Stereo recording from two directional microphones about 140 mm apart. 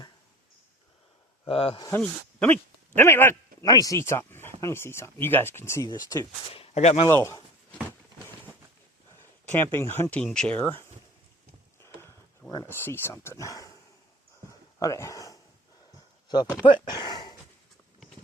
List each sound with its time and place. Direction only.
1.5 s speech: 40° left (ahead or behind)
2.0 s speech: 10° left (ahead or behind)
3.6 s speech: 25° left (ahead or behind)
5.9 s speech: 30° left (ahead or behind)
6.5 s speech: 45° left (ahead or behind)
7.1 s speech: 20° left (ahead or behind)
7.7 s a sound: 10° left (ahead or behind)
9.5 s speech: 15° left (ahead or behind)
11.8 s horse: 20° left (ahead or behind)
12.6 s speech: 15° left (ahead or behind)
14.8 s speech: 25° left (ahead or behind)
16.6 s a sound: 35° left (ahead or behind)